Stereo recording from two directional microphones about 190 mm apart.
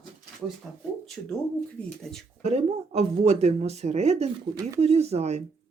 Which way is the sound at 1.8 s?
5° left (ahead or behind).